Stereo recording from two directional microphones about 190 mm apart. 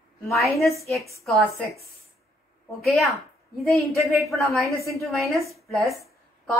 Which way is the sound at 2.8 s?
Centre (ahead or behind).